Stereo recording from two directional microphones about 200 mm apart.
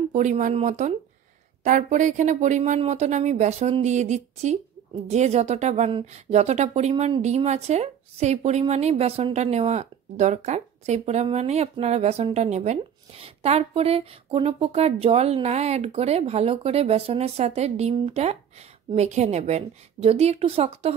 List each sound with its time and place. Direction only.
0.1 s speech: 35° right (ahead or behind)